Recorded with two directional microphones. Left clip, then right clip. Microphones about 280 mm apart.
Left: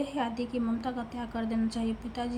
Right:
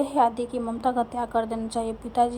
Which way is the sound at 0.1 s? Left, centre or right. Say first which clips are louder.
Right 10 dB; right.